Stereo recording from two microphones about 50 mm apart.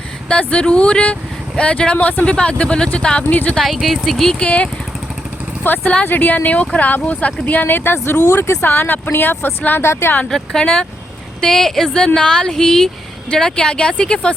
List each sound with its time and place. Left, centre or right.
0.3 s speech: left
3.6 s speech: centre
4.1 s speech: centre
4.4 s speech: left
5.6 s speech: left
8.6 s speech: left
9.8 s a woman's voice: left
10.2 s speech: centre